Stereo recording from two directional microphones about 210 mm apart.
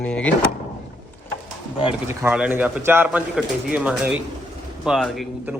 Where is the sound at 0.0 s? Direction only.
5° left (ahead or behind).